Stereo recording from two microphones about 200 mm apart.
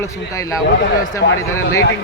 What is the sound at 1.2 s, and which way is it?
Speech, 55° left (ahead or behind).